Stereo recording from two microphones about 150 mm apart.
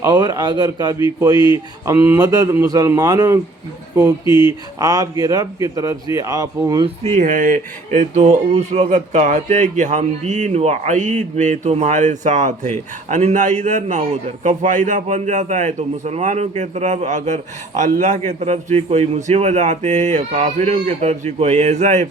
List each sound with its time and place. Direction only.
0.0 s speech: 25° right (ahead or behind)
6.8 s speech: 50° right (ahead or behind)